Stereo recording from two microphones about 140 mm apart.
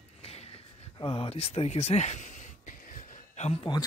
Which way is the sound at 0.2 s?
45° left (ahead or behind).